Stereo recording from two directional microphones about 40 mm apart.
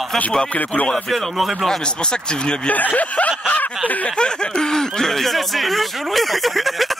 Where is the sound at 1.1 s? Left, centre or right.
Centre.